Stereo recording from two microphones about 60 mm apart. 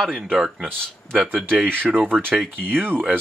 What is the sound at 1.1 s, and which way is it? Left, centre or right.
Speech, right.